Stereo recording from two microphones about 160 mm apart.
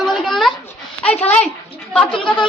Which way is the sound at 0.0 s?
Centre (ahead or behind).